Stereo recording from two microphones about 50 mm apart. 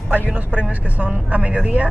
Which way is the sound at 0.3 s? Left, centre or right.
Right.